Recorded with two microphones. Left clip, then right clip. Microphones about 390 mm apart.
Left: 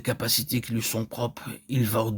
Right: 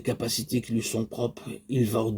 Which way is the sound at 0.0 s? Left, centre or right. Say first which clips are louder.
Left 2 dB; left.